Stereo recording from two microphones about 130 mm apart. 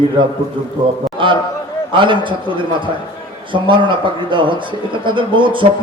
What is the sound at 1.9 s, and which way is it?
A man's voice, 40° right (ahead or behind).